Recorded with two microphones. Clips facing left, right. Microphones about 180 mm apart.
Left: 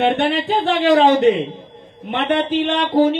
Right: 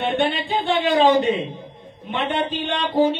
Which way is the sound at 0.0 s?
75° left (ahead or behind).